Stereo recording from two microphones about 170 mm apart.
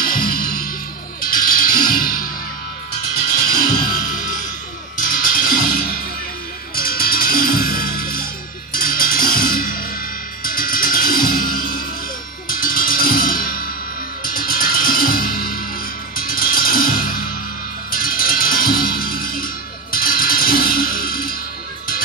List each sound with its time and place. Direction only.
0.0 s music: 55° left (ahead or behind)
3.4 s music: 55° left (ahead or behind)